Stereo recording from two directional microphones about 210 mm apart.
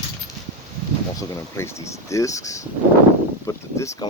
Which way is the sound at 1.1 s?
15° left (ahead or behind).